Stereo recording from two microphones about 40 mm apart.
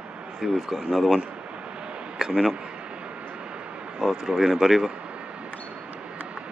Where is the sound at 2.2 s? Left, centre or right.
Right.